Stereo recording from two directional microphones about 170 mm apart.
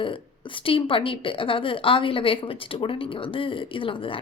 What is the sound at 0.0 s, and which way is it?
A woman's voice, 30° left (ahead or behind).